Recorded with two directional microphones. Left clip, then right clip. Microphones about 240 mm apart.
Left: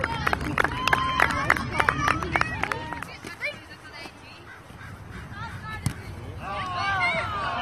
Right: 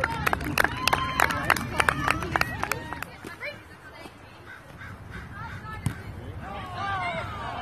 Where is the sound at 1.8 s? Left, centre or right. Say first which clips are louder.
Left 1 dB; right.